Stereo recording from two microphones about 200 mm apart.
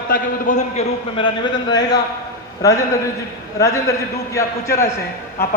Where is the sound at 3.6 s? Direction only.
15° left (ahead or behind).